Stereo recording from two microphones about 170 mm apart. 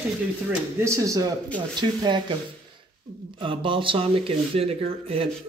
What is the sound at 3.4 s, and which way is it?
Speech, 30° right (ahead or behind).